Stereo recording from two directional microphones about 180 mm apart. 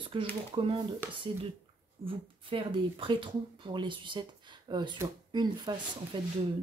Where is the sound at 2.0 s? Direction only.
30° right (ahead or behind).